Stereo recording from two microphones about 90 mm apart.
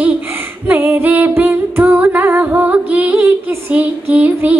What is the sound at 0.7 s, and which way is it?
Music, 25° right (ahead or behind).